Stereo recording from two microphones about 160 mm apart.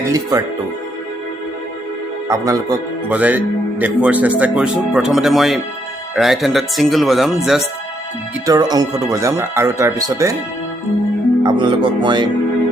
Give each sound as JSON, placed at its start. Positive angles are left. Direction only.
{"t": 0.1, "sound": "speech", "side_deg": -20}
{"t": 2.2, "sound": "speech", "side_deg": -20}
{"t": 3.1, "sound": "speech", "side_deg": -10}
{"t": 8.4, "sound": "speech", "side_deg": -25}
{"t": 11.4, "sound": "speech", "side_deg": -30}